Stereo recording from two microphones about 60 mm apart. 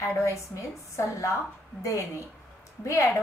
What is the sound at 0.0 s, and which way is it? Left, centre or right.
A woman's voice, left.